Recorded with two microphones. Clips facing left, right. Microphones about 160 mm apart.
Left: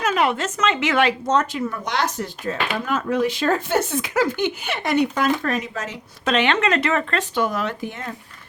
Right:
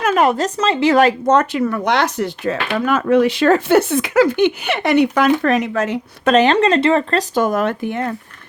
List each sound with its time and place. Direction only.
0.0 s a woman's voice: 45° right (ahead or behind)
1.3 s speech: 65° right (ahead or behind)
6.3 s speech: 35° right (ahead or behind); by 8.1 s 60° right (ahead or behind)